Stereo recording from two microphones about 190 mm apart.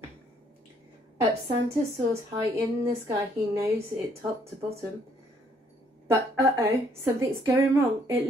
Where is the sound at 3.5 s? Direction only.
15° right (ahead or behind).